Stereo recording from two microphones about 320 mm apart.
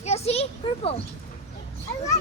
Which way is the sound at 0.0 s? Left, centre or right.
Centre.